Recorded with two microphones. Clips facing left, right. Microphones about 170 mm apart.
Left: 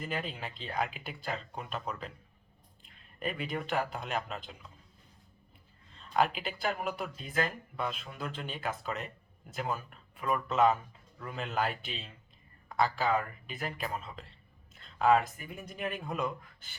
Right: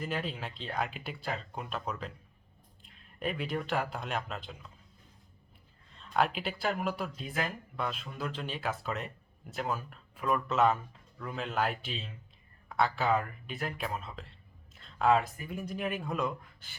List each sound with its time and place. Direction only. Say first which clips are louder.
0.0 s speech: right 1 dB; centre (ahead or behind)
6.1 s speech: even; centre (ahead or behind)
12.6 s a sound: even; centre (ahead or behind)
13.5 s speech: right 1 dB; centre (ahead or behind)